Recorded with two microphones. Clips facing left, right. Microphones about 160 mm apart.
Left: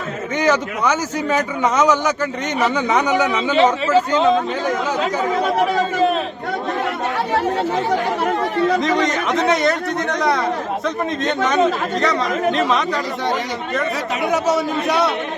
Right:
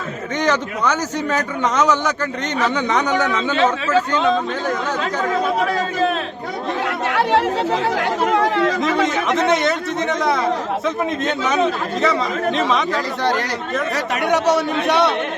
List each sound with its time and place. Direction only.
0.3 s a man's voice: 10° left (ahead or behind)
5.7 s speech: centre (ahead or behind)
7.2 s speech: centre (ahead or behind)
7.9 s speech: 85° right
8.8 s speech: 5° right (ahead or behind)